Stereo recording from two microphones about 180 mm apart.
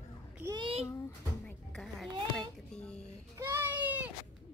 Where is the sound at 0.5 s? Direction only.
30° right (ahead or behind).